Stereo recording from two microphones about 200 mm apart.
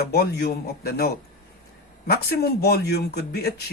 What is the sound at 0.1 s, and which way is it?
A man's voice, 55° left (ahead or behind).